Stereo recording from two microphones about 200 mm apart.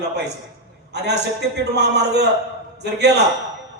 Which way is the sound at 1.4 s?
55° right (ahead or behind).